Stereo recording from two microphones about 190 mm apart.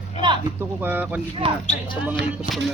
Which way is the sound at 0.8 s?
10° right (ahead or behind).